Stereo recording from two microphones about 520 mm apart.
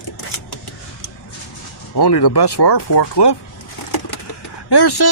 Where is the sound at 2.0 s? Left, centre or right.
Left.